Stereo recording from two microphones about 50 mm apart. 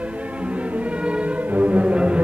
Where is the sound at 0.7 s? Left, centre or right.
Right.